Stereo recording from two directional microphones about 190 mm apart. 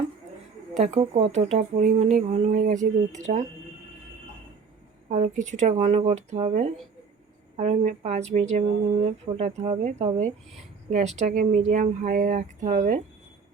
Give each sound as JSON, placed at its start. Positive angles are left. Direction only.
{"t": 0.9, "sound": "speech", "side_deg": -35}
{"t": 5.0, "sound": "speech", "side_deg": -40}